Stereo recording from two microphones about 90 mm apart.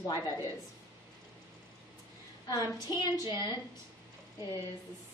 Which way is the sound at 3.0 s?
55° left (ahead or behind).